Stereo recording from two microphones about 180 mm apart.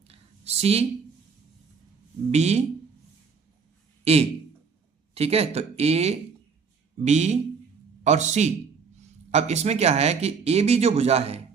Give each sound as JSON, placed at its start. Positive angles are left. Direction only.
{"t": 0.1, "sound": "a sound", "side_deg": -35}
{"t": 2.3, "sound": "speech", "side_deg": -40}
{"t": 4.0, "sound": "a man's voice", "side_deg": -35}